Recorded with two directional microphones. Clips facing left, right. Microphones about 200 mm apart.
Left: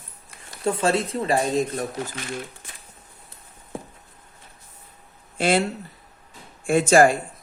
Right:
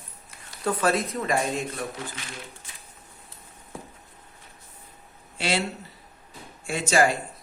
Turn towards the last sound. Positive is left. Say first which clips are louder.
# left 7 dB
turn(degrees=50)  # may be behind; listen again after turning